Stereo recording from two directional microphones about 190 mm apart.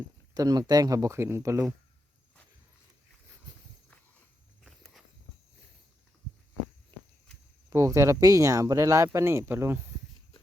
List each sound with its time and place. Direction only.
0.3 s speech: 20° right (ahead or behind)
4.6 s walk: centre (ahead or behind)
6.9 s walk: 25° right (ahead or behind)
7.7 s speech: 15° right (ahead or behind)